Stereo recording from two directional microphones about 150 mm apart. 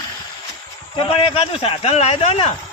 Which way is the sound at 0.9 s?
35° left (ahead or behind).